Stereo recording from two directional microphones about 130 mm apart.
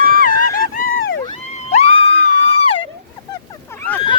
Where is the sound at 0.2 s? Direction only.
90° left.